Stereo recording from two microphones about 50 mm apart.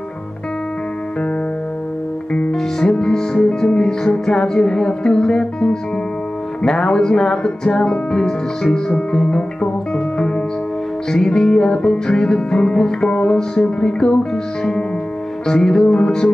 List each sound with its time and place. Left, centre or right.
2.5 s music: centre